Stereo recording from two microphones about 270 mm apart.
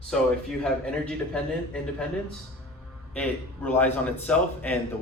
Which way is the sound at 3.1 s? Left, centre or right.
Centre.